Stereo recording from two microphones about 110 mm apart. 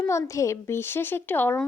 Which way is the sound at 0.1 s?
25° left (ahead or behind).